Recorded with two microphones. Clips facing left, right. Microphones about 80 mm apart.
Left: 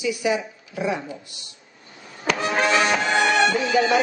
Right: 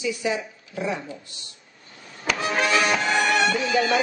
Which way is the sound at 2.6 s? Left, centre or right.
Left.